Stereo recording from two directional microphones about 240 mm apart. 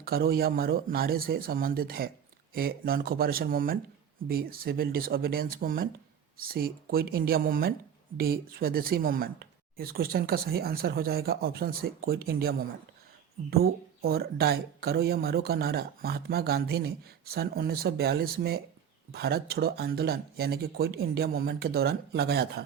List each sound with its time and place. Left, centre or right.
0.0 s speech: right